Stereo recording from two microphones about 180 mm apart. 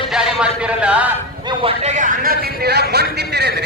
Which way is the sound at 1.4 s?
30° right (ahead or behind).